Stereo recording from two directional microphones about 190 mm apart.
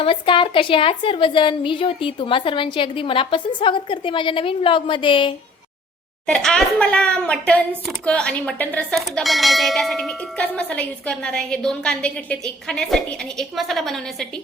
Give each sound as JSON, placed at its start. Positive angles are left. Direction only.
{"t": 0.0, "sound": "a woman's voice", "side_deg": 25}
{"t": 6.2, "sound": "speech", "side_deg": 5}